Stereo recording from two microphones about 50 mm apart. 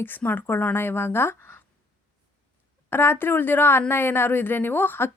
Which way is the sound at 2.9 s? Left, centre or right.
Left.